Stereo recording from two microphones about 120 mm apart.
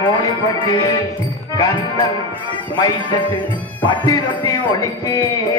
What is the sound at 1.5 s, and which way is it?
Music, 30° left (ahead or behind).